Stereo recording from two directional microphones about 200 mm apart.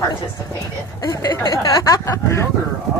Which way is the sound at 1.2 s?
20° left (ahead or behind).